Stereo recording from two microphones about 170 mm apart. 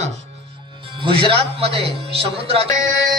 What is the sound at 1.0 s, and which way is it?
A man's voice, 30° right (ahead or behind).